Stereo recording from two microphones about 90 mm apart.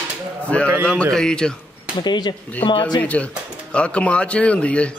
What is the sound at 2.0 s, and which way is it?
Speech, 55° left (ahead or behind).